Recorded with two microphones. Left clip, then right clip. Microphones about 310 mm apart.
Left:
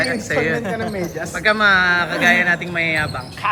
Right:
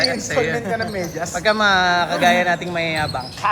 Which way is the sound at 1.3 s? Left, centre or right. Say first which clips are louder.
Left 2 dB; centre.